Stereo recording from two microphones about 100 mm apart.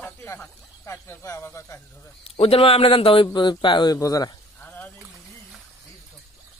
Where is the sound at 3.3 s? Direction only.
50° left (ahead or behind).